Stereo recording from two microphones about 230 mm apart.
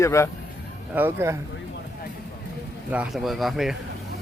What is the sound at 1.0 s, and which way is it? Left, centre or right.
Speech, centre.